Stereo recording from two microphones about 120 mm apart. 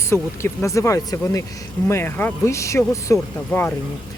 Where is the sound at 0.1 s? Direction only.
25° left (ahead or behind).